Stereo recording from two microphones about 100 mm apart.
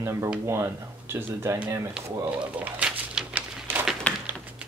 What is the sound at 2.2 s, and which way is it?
Pigeon, 15° right (ahead or behind).